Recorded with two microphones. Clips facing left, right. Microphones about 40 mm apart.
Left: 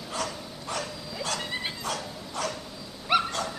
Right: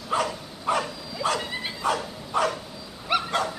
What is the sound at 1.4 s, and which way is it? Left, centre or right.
Dog, centre.